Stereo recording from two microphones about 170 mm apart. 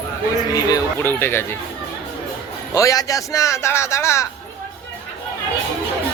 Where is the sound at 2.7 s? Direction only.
20° left (ahead or behind).